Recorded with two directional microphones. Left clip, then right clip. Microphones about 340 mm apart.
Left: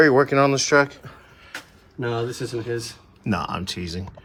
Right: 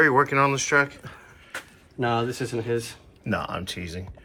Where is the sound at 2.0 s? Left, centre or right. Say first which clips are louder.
Right 1 dB; centre.